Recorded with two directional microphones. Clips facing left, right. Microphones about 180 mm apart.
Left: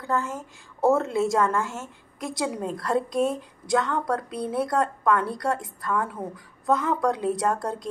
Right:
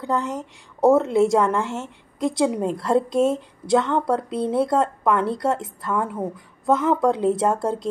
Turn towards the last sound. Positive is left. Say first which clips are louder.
# right 5 dB
turn(degrees=-25)  # may be behind; listen again after turning